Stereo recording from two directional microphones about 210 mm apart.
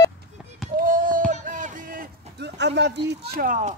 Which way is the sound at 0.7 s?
40° right (ahead or behind).